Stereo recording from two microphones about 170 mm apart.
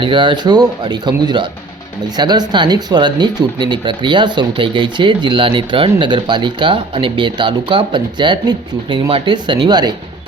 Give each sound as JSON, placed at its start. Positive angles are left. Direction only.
{"t": 0.0, "sound": "speech", "side_deg": -30}